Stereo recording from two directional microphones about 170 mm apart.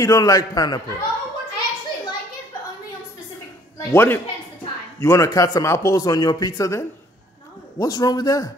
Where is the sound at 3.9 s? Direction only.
15° left (ahead or behind).